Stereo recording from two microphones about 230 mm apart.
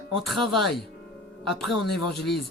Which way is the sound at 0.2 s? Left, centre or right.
Centre.